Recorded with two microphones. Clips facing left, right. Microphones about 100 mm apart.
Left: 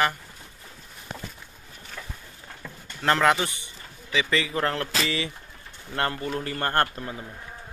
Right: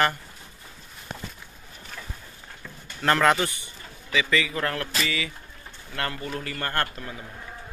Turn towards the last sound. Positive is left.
turn(degrees=25)  # may be behind; listen again after turning